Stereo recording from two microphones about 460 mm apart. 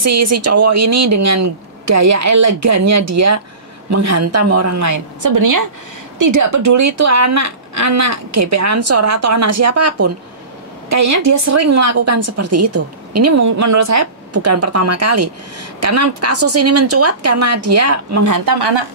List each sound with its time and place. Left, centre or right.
0.0 s a woman's voice: right